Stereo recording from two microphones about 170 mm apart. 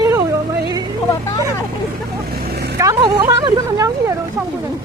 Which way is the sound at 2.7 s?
20° right (ahead or behind).